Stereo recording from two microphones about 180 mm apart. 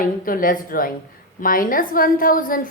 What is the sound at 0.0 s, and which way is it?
A woman's voice, 50° left (ahead or behind).